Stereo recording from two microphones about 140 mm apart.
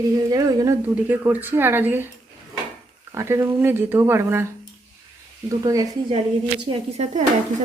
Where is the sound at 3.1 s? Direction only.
20° right (ahead or behind).